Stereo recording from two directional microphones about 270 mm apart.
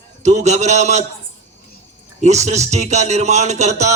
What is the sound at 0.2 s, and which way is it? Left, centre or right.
Speech, right.